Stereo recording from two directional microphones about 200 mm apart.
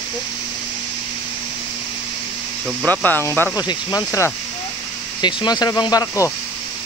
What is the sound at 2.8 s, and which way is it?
Speech, 10° left (ahead or behind).